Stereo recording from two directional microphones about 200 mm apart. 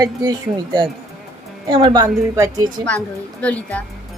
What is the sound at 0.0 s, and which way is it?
Speech, 20° right (ahead or behind).